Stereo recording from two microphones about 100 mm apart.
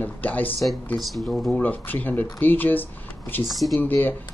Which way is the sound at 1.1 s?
Centre (ahead or behind).